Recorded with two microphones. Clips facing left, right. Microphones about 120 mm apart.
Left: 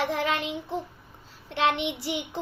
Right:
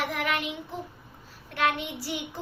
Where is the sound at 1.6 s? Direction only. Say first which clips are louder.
Left 3 dB; 90° left.